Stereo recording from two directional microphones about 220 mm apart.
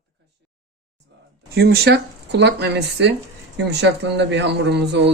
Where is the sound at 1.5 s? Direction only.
45° right (ahead or behind).